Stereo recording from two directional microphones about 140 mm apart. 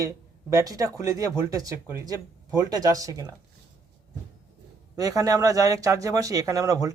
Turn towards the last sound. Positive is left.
turn(degrees=-25)  # may be behind; listen again after turning